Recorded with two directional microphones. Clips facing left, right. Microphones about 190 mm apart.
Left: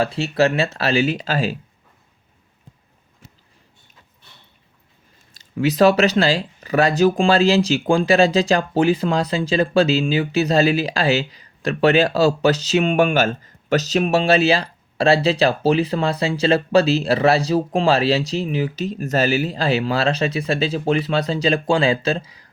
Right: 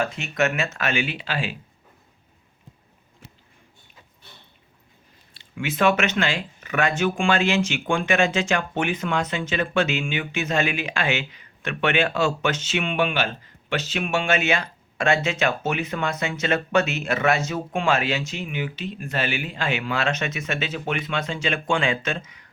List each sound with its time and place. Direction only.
0.0 s speech: 35° left (ahead or behind)
5.3 s speech: 40° left (ahead or behind)